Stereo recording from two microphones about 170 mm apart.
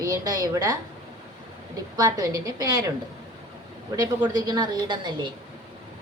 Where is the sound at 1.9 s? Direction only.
20° right (ahead or behind).